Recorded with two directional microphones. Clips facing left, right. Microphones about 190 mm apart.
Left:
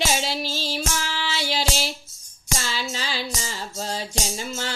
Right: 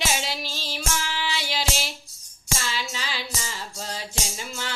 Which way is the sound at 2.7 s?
35° left (ahead or behind).